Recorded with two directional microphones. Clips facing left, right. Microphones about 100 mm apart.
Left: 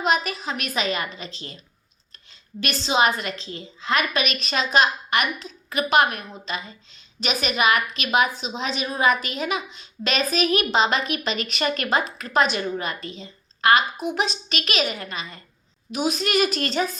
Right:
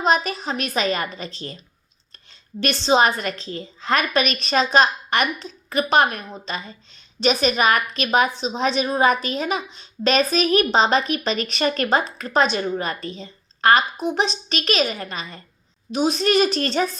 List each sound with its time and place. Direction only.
0.0 s a woman's voice: 35° right (ahead or behind)
2.6 s a woman's voice: 35° right (ahead or behind)